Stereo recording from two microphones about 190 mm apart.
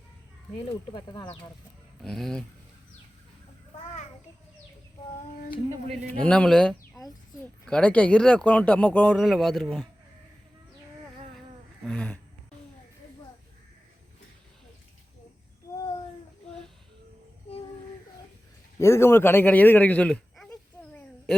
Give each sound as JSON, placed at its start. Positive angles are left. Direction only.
{"t": 0.6, "sound": "speech", "side_deg": 20}
{"t": 2.0, "sound": "speech", "side_deg": 0}
{"t": 5.9, "sound": "speech", "side_deg": 5}
{"t": 11.9, "sound": "speech", "side_deg": 5}
{"t": 18.8, "sound": "a sound", "side_deg": 15}